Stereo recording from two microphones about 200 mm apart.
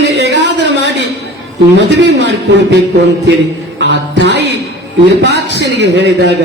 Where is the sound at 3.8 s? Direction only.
60° right (ahead or behind).